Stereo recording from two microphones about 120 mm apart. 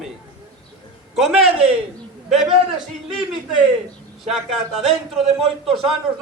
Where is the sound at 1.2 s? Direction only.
Centre (ahead or behind).